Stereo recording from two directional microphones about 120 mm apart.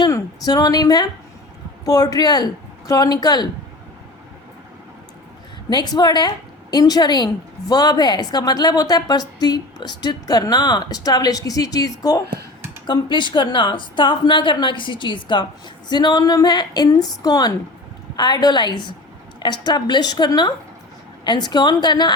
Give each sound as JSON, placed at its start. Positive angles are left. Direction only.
{"t": 0.0, "sound": "a woman's voice", "side_deg": 30}
{"t": 5.7, "sound": "a woman's voice", "side_deg": 35}